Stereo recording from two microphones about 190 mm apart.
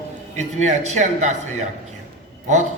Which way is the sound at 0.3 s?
35° right (ahead or behind).